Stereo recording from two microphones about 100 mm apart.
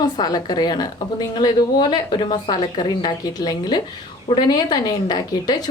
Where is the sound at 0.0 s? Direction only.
40° left (ahead or behind).